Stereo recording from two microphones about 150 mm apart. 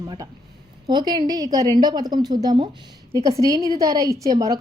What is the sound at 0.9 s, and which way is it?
A woman's voice, 30° right (ahead or behind).